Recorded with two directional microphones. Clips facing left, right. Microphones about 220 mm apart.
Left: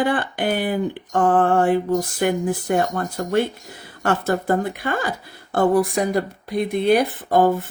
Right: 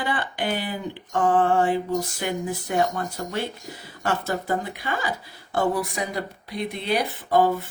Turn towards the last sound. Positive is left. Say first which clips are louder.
# left 3 dB
turn(degrees=50)  # may be behind; listen again after turning